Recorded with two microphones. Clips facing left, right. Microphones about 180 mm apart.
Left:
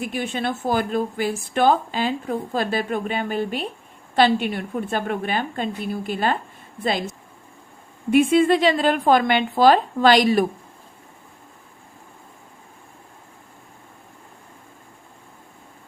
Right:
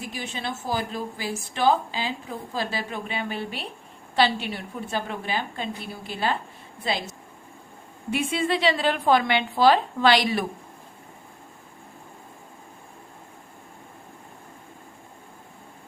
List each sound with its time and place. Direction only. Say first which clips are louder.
0.0 s a woman's voice: left 7 dB; 55° left (ahead or behind)